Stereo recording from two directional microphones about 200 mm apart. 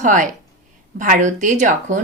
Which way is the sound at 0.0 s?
40° right (ahead or behind).